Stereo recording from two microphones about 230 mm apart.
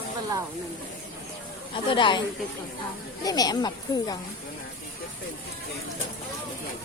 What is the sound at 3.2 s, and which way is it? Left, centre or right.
Speech, centre.